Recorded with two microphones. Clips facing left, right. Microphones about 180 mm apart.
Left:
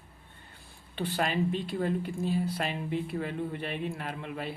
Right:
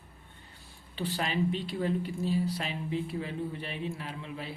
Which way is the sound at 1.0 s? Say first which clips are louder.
Left 2 dB; 50° left (ahead or behind).